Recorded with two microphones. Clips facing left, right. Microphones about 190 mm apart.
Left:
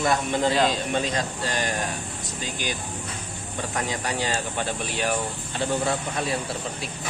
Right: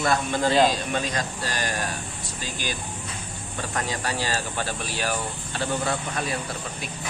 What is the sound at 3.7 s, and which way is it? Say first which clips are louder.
Speech: even; 20° left (ahead or behind).